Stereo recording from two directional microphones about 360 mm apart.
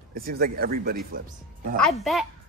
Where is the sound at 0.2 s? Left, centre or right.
Right.